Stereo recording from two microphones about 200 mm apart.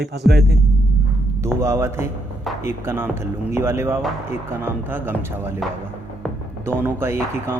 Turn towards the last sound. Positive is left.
turn(degrees=-10)  # may be behind; listen again after turning